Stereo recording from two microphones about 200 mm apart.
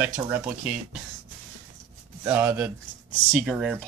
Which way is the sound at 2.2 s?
10° right (ahead or behind).